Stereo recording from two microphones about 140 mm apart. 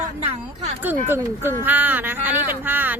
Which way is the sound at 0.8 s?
15° right (ahead or behind).